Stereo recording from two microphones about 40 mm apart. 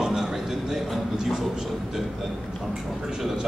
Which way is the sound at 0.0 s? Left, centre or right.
Centre.